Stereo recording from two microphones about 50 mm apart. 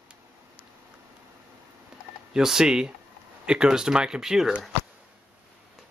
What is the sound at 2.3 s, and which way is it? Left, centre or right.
Speech, centre.